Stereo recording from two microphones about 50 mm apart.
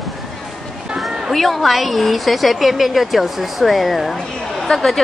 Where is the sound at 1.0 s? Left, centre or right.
Centre.